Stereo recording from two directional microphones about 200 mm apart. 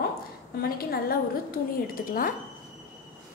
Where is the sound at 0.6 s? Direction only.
50° left (ahead or behind).